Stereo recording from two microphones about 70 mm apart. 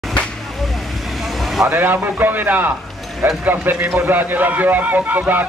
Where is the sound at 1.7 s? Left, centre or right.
Right.